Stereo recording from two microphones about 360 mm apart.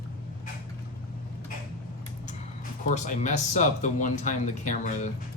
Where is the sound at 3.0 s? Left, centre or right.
Left.